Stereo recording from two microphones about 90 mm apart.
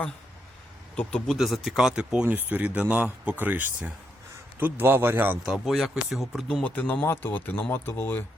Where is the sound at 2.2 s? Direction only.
20° right (ahead or behind).